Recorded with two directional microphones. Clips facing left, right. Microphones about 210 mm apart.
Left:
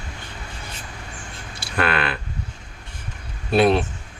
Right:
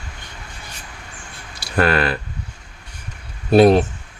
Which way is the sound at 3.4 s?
40° right (ahead or behind).